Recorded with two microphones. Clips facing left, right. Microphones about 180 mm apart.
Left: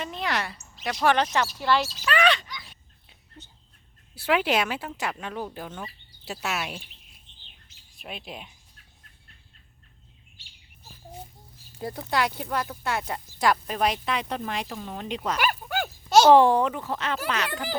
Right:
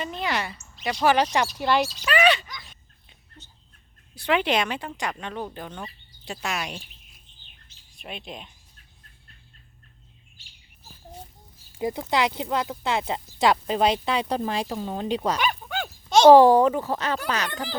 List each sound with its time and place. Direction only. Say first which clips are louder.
0.0 s a woman's voice: right 1 dB; centre (ahead or behind); by 1.9 s 15° right (ahead or behind)
2.1 s a sound: right 3 dB; 5° right (ahead or behind)
4.1 s a woman's voice: right 1 dB; 5° left (ahead or behind)
7.9 s a woman's voice: right 1 dB; centre (ahead or behind)
11.8 s speech: right 3 dB; 20° right (ahead or behind); by 15.4 s 35° right (ahead or behind)
15.4 s a sound: even; 5° left (ahead or behind)
16.3 s speech: right 4 dB; 40° right (ahead or behind)